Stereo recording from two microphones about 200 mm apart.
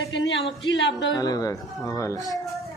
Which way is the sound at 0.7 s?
65° left (ahead or behind).